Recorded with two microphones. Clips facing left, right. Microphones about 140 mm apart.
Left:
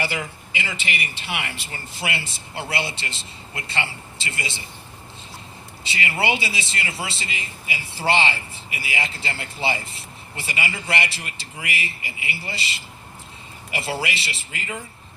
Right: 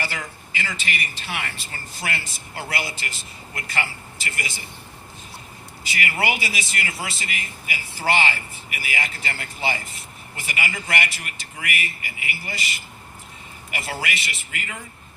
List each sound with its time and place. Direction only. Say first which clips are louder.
0.5 s a man's voice: even; 20° left (ahead or behind)
5.8 s a man's voice: left 1 dB; 25° left (ahead or behind)